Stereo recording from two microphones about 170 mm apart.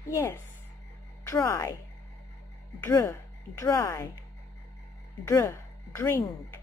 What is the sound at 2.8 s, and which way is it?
Speech, 15° left (ahead or behind).